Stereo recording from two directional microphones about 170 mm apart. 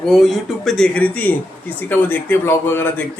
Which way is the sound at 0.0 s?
Centre (ahead or behind).